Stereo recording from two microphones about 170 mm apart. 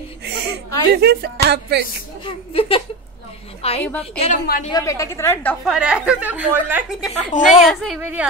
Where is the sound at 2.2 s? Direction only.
30° left (ahead or behind).